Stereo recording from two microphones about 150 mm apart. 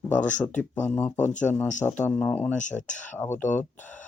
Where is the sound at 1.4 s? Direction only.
10° left (ahead or behind).